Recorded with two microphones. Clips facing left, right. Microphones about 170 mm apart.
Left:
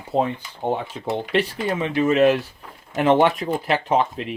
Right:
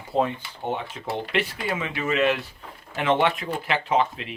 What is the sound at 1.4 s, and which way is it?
Speech, 35° left (ahead or behind).